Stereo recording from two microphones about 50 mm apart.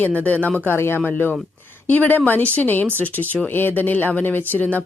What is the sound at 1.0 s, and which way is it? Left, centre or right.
Speech, left.